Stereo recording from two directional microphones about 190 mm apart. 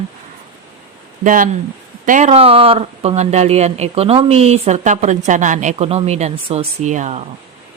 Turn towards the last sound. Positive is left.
turn(degrees=-40)  # may be behind; listen again after turning